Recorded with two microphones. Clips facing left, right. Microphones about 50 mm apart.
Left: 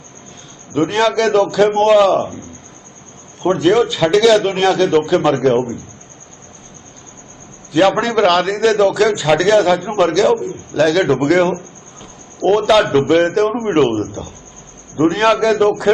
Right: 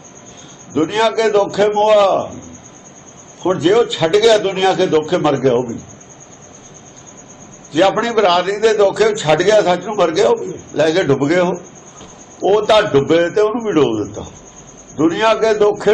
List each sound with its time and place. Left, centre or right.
0.7 s a man's voice: centre
3.4 s a man's voice: centre
7.7 s a man's voice: centre